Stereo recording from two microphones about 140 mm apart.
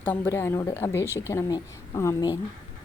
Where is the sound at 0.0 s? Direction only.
15° left (ahead or behind).